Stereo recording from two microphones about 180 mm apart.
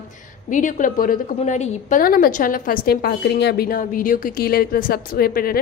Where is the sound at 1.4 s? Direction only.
35° left (ahead or behind).